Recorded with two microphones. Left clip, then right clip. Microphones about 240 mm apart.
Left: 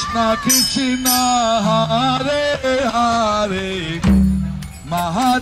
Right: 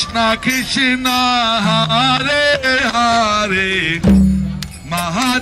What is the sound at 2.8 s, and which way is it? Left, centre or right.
Music, right.